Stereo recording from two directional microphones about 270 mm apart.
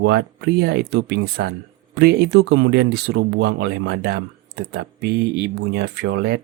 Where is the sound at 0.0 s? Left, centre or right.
Right.